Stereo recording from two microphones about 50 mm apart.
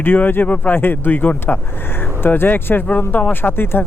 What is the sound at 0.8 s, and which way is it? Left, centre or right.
Speech, left.